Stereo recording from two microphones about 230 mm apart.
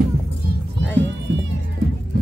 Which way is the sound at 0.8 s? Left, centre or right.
Right.